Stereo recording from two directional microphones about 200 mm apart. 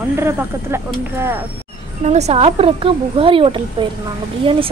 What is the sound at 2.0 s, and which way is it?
A woman's voice, 30° right (ahead or behind).